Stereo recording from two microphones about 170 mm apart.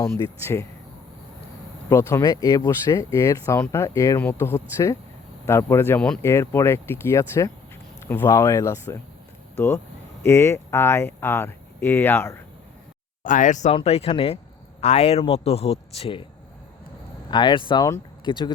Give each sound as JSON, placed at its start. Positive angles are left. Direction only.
{"t": 0.0, "sound": "speech", "side_deg": 15}
{"t": 1.9, "sound": "speech", "side_deg": 15}
{"t": 13.2, "sound": "speech", "side_deg": 50}
{"t": 17.3, "sound": "speech", "side_deg": 25}